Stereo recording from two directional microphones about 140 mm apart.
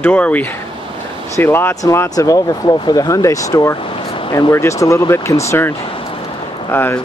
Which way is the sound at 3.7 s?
40° left (ahead or behind).